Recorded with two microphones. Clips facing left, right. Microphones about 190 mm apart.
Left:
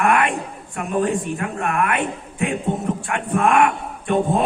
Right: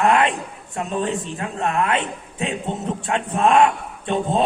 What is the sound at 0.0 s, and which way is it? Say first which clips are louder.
Speech: right 1 dB; 25° right (ahead or behind).